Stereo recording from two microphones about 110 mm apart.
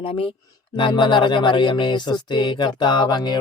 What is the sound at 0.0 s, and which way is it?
Music, 55° left (ahead or behind).